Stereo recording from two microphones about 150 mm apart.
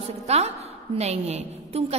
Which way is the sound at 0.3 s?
45° right (ahead or behind).